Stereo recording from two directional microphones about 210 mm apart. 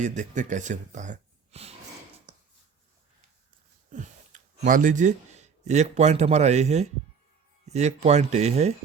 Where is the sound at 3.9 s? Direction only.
40° right (ahead or behind).